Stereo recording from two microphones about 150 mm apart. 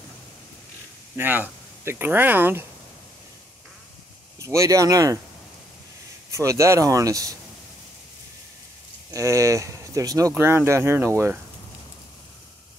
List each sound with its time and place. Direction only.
1.1 s speech: 15° right (ahead or behind)
4.4 s speech: 20° right (ahead or behind)
6.3 s speech: 20° right (ahead or behind)
9.1 s speech: 20° right (ahead or behind)